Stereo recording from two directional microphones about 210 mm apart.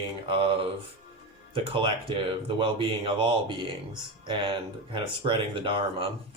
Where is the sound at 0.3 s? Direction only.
25° right (ahead or behind).